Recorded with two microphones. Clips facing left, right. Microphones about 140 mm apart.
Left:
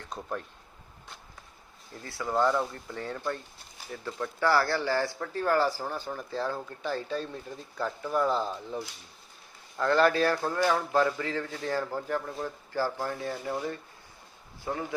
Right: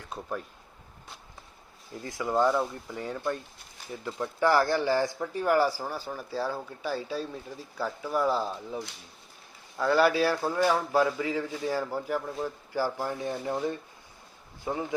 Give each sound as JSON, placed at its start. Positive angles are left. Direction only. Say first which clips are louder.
{"t": 0.0, "sound": "speech", "louder": "even", "side_deg": -5}
{"t": 2.0, "sound": "speech", "louder": "right 1 dB", "side_deg": -15}